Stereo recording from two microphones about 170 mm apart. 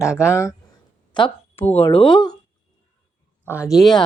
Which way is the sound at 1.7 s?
35° left (ahead or behind).